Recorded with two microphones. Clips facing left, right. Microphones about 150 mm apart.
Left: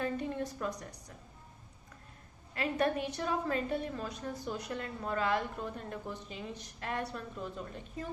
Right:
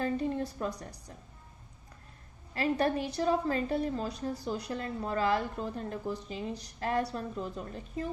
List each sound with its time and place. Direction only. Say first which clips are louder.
0.0 s a woman's voice: right 4 dB; 35° right (ahead or behind)
2.6 s a woman's voice: right 3 dB; 35° right (ahead or behind)